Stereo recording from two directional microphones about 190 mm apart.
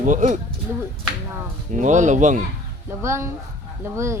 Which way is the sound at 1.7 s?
40° right (ahead or behind).